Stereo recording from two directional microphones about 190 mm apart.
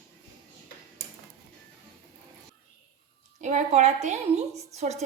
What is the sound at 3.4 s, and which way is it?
A woman's voice, 35° right (ahead or behind).